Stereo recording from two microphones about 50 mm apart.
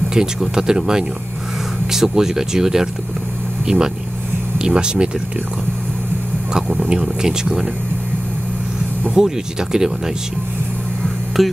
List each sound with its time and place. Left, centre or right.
0.1 s speech: centre
6.7 s speech: right
9.1 s speech: centre
11.4 s speech: centre